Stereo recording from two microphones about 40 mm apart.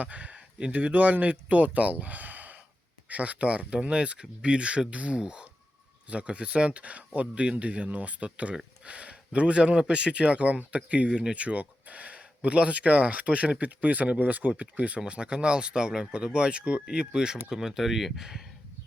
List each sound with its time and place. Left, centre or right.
0.0 s speech: right
0.9 s speech: right
5.1 s speech: right
11.4 s speech: right
17.5 s speech: centre